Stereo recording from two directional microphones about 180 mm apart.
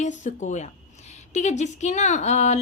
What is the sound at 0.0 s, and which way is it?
Speech, 40° left (ahead or behind).